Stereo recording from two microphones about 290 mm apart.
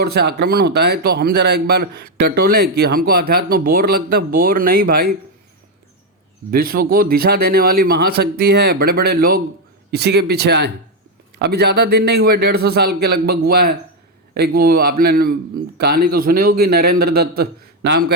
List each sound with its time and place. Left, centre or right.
0.0 s speech: right
6.5 s speech: right